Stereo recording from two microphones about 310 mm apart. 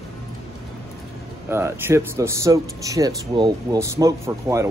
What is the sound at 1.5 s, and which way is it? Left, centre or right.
Speech, centre.